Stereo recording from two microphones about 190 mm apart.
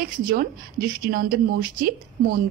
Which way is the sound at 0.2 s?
50° right (ahead or behind).